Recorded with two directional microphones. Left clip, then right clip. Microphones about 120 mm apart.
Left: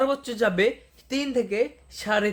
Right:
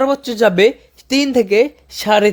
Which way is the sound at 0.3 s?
85° right.